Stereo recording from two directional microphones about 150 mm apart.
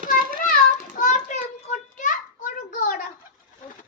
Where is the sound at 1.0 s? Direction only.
55° left (ahead or behind).